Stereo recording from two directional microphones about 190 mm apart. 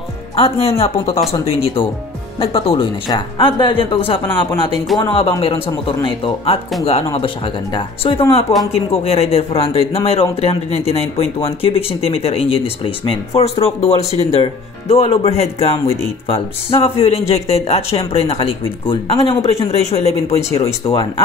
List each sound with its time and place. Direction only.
0.4 s speech: 30° left (ahead or behind)